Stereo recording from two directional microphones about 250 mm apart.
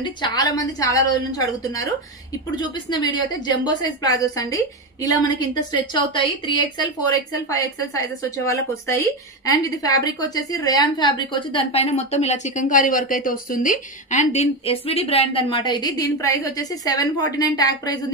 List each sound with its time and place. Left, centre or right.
0.0 s a woman's voice: centre